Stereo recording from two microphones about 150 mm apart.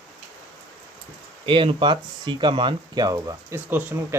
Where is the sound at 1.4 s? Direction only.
35° right (ahead or behind).